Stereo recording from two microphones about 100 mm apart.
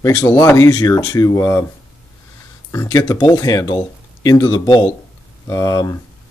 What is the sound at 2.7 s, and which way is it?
Speech, 35° left (ahead or behind).